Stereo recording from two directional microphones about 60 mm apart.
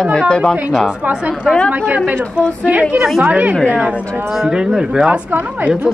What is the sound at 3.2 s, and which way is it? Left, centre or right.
Speech, right.